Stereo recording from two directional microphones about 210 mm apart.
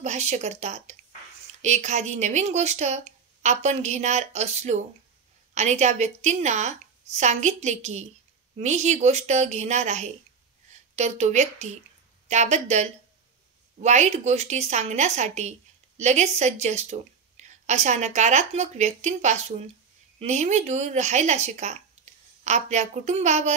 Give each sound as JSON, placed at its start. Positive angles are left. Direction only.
{"t": 0.0, "sound": "a woman's voice", "side_deg": -35}